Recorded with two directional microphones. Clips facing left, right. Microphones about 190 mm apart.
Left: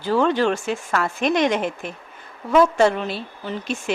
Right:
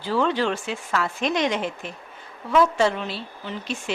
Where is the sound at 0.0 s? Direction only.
50° left (ahead or behind).